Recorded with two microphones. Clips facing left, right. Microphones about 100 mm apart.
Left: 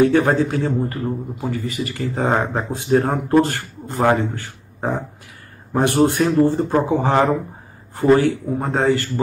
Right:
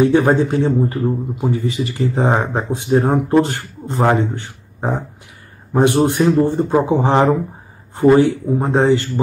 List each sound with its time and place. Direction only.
0.0 s a man's voice: 20° right (ahead or behind)